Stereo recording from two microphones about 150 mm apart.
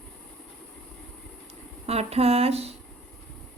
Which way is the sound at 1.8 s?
45° right (ahead or behind).